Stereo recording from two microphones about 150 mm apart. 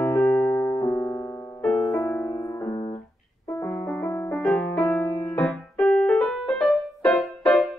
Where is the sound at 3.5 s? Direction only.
10° left (ahead or behind).